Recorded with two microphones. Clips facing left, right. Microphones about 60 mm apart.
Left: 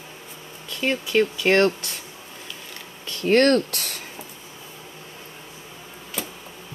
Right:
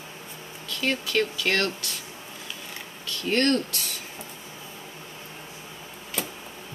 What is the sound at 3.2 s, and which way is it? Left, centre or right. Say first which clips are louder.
Speech: left 6 dB; left.